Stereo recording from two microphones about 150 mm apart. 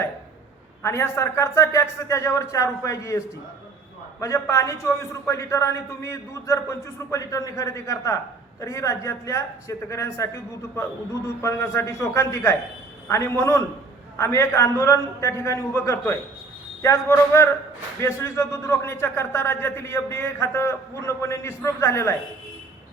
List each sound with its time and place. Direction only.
0.8 s a man's voice: 20° left (ahead or behind)